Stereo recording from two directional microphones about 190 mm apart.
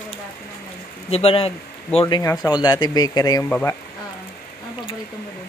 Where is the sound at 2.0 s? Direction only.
20° left (ahead or behind).